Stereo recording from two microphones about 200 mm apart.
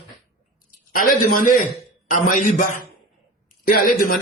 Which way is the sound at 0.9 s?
45° left (ahead or behind).